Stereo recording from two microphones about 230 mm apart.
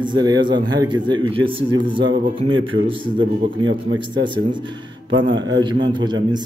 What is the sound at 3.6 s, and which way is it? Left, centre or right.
Speech, right.